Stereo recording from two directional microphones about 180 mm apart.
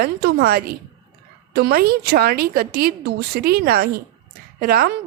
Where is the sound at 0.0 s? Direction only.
65° right (ahead or behind).